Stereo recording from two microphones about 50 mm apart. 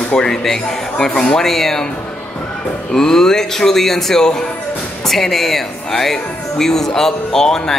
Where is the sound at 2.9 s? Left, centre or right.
Centre.